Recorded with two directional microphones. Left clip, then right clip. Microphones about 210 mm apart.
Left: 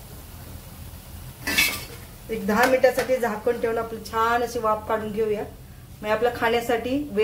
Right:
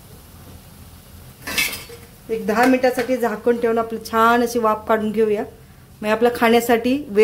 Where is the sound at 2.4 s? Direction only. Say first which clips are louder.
Right 2 dB; 45° right (ahead or behind).